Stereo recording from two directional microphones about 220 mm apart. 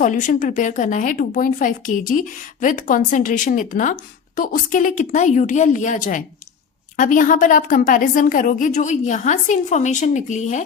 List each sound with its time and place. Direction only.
0.0 s speech: 35° left (ahead or behind)